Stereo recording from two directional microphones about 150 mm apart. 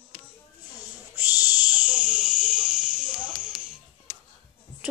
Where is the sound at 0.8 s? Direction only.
10° right (ahead or behind).